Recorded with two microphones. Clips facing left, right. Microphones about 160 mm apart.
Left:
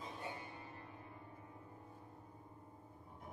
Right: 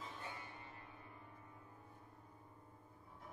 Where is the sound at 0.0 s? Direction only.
20° left (ahead or behind).